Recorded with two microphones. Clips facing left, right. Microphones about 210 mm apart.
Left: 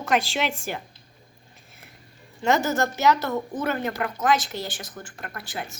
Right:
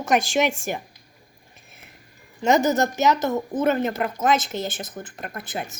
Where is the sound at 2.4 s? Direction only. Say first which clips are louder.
Right 3 dB; 15° right (ahead or behind).